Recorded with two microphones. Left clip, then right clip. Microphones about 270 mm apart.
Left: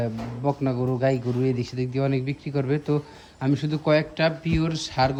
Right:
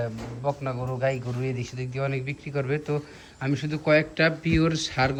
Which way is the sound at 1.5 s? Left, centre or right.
Centre.